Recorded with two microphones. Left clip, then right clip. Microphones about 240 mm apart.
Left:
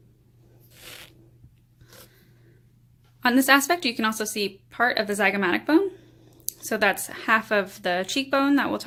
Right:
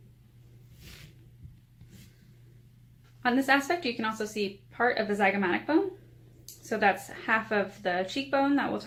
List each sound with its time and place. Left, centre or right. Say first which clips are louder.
3.2 s a woman's voice: left 6 dB; left